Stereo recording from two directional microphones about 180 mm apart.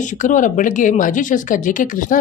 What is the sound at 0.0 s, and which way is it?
Speech, 45° left (ahead or behind).